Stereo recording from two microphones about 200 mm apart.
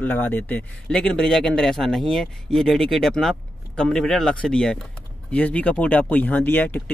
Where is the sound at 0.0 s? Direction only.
10° left (ahead or behind).